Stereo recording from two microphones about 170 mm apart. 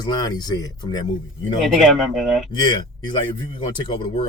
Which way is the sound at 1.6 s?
Centre (ahead or behind).